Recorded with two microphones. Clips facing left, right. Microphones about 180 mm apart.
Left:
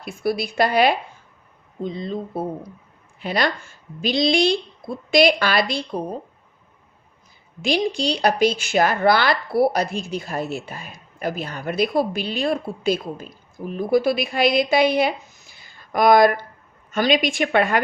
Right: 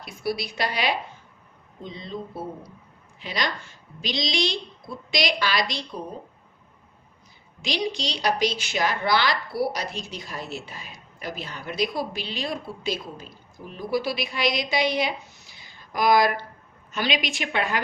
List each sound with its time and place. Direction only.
0.0 s a woman's voice: 50° left (ahead or behind)
7.6 s a woman's voice: 50° left (ahead or behind)